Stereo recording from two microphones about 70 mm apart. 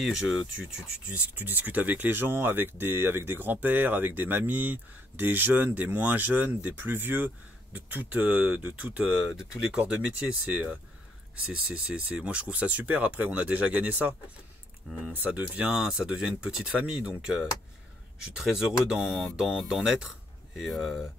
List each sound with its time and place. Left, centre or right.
0.0 s speech: centre
0.6 s speech: centre
15.1 s speech: right
15.7 s speech: centre